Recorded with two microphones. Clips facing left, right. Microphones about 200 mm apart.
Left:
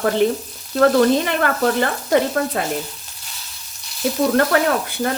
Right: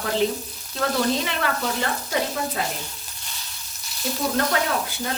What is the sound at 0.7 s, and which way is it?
Speech, 55° left (ahead or behind).